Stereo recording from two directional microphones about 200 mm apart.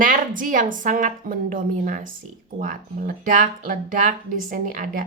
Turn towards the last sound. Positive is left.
turn(degrees=-45)  # may be behind; listen again after turning